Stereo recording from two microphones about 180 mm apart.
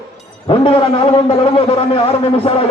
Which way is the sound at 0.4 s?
30° left (ahead or behind).